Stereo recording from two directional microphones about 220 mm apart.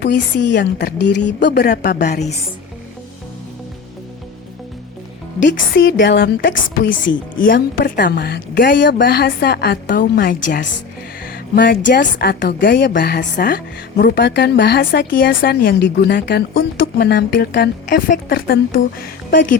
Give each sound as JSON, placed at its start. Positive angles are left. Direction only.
{"t": 0.0, "sound": "a woman's voice", "side_deg": 50}
{"t": 5.5, "sound": "a woman's voice", "side_deg": 55}
{"t": 11.3, "sound": "music", "side_deg": 40}
{"t": 11.9, "sound": "a woman's voice", "side_deg": 40}